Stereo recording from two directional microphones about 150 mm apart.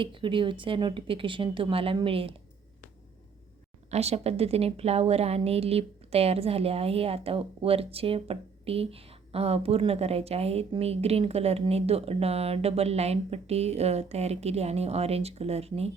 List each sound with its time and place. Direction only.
0.0 s speech: 35° right (ahead or behind)
3.9 s a woman's voice: 45° right (ahead or behind)